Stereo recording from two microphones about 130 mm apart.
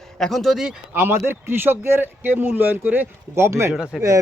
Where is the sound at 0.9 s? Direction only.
15° right (ahead or behind).